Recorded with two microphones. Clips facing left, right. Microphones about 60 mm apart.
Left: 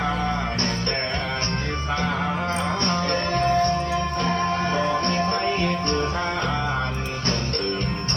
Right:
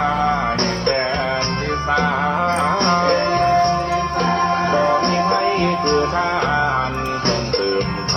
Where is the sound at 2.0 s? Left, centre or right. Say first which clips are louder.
Right 7 dB; right.